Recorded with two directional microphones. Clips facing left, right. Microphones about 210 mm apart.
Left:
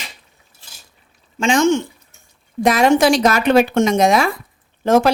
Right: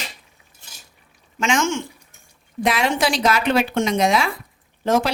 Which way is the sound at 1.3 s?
35° left (ahead or behind).